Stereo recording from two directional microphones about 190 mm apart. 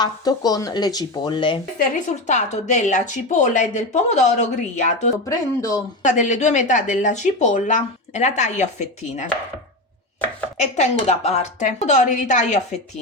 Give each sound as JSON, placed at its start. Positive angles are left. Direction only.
{"t": 0.0, "sound": "speech", "side_deg": 20}
{"t": 2.2, "sound": "speech", "side_deg": 40}
{"t": 5.1, "sound": "speech", "side_deg": 20}
{"t": 6.0, "sound": "speech", "side_deg": 40}
{"t": 10.6, "sound": "speech", "side_deg": 35}